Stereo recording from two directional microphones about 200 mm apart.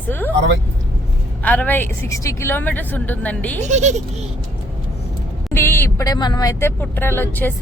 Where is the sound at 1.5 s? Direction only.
10° left (ahead or behind).